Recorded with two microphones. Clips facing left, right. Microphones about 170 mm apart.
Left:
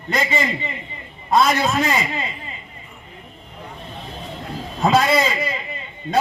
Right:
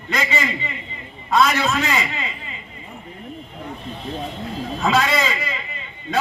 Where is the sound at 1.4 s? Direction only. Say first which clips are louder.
Even; 45° left (ahead or behind).